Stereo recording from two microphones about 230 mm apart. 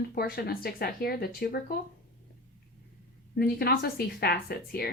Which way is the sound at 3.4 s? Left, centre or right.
Left.